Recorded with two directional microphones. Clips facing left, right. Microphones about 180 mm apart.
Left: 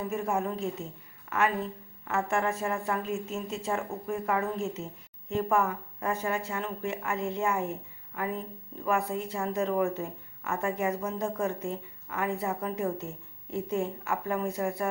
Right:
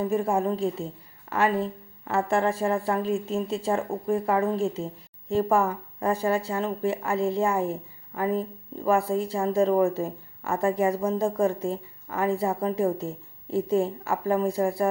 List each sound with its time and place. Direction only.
0.0 s speech: 30° right (ahead or behind)